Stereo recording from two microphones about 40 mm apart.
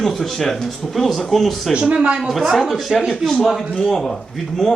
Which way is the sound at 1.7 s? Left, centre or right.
Right.